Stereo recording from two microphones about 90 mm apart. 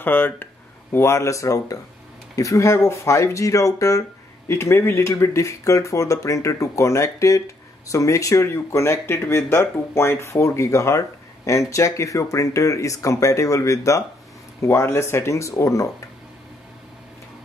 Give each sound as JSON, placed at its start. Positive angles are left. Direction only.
{"t": 0.0, "sound": "speech", "side_deg": 20}